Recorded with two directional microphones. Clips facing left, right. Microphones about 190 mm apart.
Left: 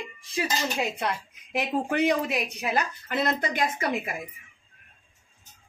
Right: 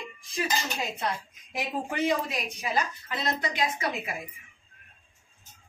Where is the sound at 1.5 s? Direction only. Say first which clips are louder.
Left 5 dB; 65° left (ahead or behind).